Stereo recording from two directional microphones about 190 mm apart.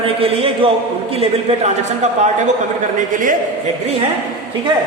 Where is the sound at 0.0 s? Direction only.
30° right (ahead or behind).